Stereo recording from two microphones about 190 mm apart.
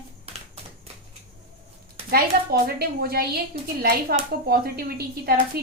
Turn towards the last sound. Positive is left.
turn(degrees=-55)  # may be behind; listen again after turning